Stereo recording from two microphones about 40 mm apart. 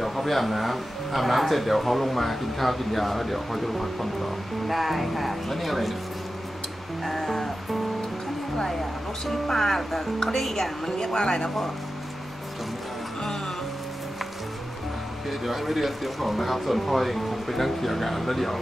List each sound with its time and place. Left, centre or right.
0.0 s speech: centre
7.0 s speech: centre
9.2 s speech: centre
15.2 s speech: centre